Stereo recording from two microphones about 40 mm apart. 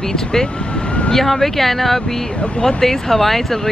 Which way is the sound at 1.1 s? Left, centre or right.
Centre.